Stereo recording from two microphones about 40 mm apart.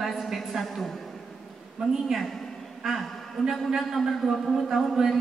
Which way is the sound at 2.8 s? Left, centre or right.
Centre.